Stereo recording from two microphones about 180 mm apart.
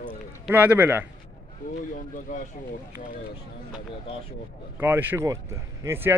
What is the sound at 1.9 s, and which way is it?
Speech, 50° left (ahead or behind).